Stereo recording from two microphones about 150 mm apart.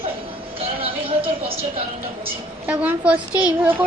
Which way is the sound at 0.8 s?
35° right (ahead or behind).